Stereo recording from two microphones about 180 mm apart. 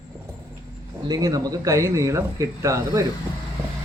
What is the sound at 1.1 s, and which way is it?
Speech, 20° right (ahead or behind).